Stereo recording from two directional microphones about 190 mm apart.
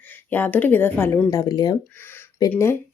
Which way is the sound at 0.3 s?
10° left (ahead or behind).